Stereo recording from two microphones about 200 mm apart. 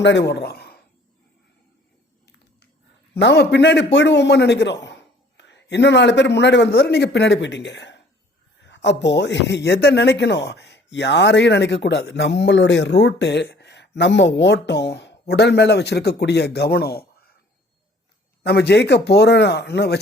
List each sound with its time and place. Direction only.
0.0 s a woman's voice: 60° left (ahead or behind)
2.2 s a sound: 55° left (ahead or behind)
3.2 s speech: 60° left (ahead or behind)
18.4 s speech: 55° left (ahead or behind)